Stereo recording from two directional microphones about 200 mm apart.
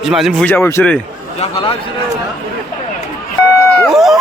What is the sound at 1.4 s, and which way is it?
Speech, 30° left (ahead or behind).